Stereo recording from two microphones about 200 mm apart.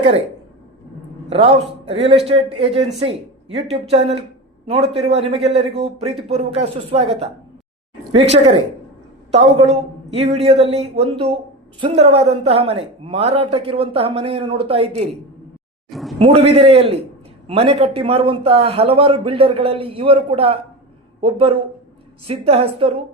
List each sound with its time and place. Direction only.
1.3 s a man's voice: 30° right (ahead or behind)
15.9 s a sound: centre (ahead or behind)
16.1 s a man's voice: 30° right (ahead or behind)